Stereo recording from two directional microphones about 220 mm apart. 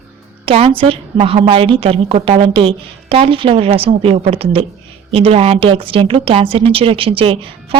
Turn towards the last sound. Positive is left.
turn(degrees=-25)  # may be behind; listen again after turning